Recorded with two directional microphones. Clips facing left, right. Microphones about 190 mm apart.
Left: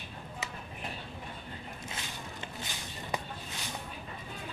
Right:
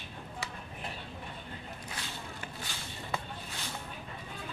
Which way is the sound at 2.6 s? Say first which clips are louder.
Left 1 dB; 15° left (ahead or behind).